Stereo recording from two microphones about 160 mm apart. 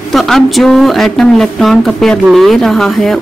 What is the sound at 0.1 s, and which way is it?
Speech, centre (ahead or behind).